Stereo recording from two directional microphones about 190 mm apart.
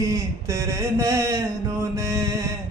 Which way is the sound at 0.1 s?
15° right (ahead or behind).